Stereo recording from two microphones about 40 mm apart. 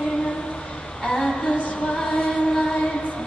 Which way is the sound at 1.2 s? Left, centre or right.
Left.